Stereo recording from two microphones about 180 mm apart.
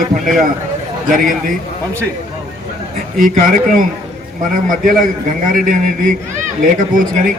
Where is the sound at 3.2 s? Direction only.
50° right (ahead or behind).